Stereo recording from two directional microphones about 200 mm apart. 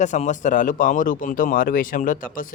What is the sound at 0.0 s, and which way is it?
Speech, 35° left (ahead or behind).